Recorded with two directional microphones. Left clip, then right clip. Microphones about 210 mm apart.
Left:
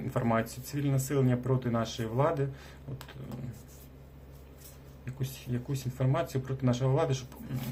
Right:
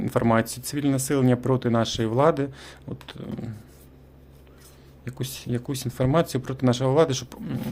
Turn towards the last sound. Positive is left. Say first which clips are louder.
# right 7 dB
turn(degrees=-50)  # may be behind; listen again after turning